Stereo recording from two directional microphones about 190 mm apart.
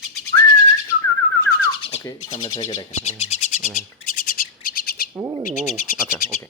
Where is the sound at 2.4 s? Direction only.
20° left (ahead or behind).